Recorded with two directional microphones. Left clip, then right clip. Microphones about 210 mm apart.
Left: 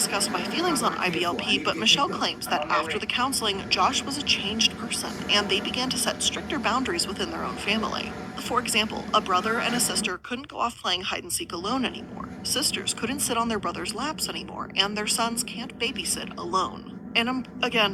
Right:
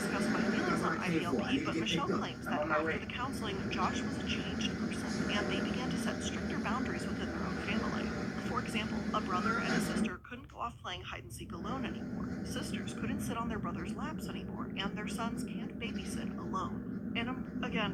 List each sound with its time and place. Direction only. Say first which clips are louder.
0.1 s speech: left 7 dB; 45° left (ahead or behind)
8.4 s speech: left 15 dB; 45° left (ahead or behind)